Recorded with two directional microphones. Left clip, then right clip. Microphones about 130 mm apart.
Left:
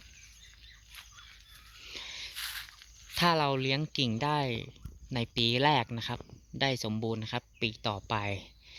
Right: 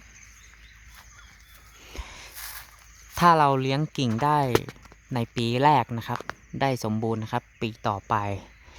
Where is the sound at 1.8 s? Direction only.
15° right (ahead or behind).